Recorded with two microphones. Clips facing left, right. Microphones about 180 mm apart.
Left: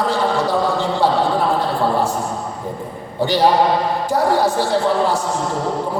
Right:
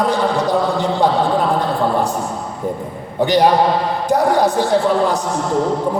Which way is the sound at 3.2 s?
20° right (ahead or behind).